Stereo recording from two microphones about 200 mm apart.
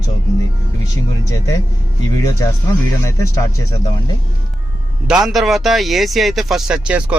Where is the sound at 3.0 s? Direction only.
15° left (ahead or behind).